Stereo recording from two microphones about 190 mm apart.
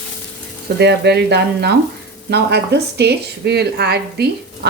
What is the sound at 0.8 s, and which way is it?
Speech, 60° right (ahead or behind).